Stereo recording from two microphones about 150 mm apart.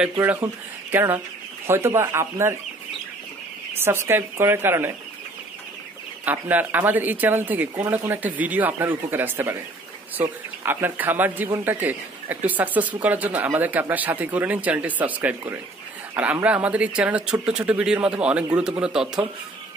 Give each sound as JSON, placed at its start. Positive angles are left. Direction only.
{"t": 0.2, "sound": "speech", "side_deg": -15}
{"t": 3.8, "sound": "speech", "side_deg": -15}
{"t": 6.2, "sound": "speech", "side_deg": -10}